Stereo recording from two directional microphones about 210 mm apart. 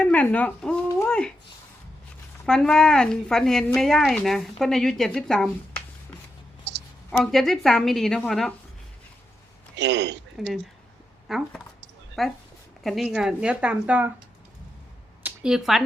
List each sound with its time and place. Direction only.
0.0 s a sound: 5° left (ahead or behind)
2.5 s speech: 5° left (ahead or behind)
6.7 s clicking: 55° right (ahead or behind)
7.1 s speech: centre (ahead or behind)
9.7 s a man's voice: 55° right (ahead or behind)
10.4 s speech: centre (ahead or behind)
15.2 s a sound: 5° right (ahead or behind)